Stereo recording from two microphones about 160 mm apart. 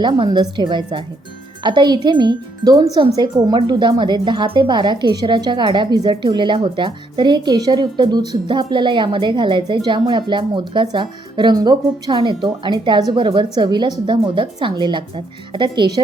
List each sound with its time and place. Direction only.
0.0 s speech: 30° right (ahead or behind)